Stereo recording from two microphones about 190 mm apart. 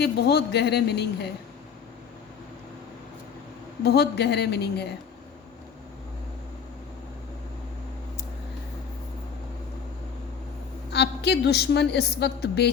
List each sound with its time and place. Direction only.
0.0 s a woman's voice: 60° left (ahead or behind)
3.8 s a woman's voice: 60° left (ahead or behind)
10.9 s a woman's voice: 65° left (ahead or behind)